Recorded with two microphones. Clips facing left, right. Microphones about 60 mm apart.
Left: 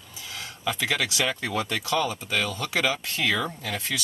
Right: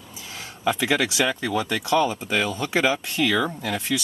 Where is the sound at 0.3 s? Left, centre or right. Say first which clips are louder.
Right 6 dB; right.